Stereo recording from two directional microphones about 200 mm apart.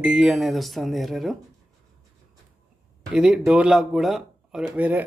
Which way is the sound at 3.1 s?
5° right (ahead or behind).